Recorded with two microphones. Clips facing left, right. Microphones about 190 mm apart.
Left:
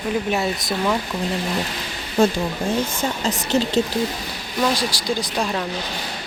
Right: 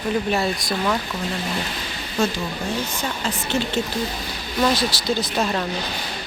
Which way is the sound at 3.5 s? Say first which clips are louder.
Left 4 dB; 40° left (ahead or behind).